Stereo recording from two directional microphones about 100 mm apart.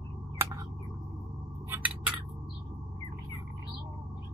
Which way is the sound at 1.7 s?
15° right (ahead or behind).